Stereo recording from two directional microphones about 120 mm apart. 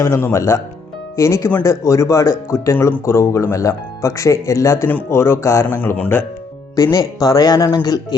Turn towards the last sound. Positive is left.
turn(degrees=30)  # may be behind; listen again after turning